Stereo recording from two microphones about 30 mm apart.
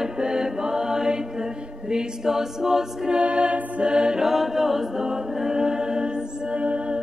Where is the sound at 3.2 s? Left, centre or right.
Right.